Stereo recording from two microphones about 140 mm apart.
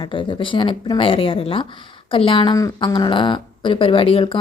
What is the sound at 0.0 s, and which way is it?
A woman's voice, 35° left (ahead or behind).